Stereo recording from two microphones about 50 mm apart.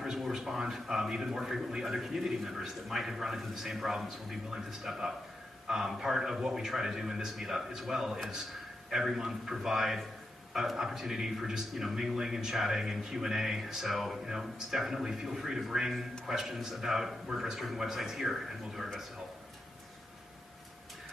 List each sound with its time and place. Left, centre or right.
0.0 s a man's voice: centre